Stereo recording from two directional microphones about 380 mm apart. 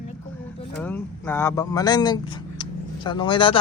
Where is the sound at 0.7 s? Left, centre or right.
Centre.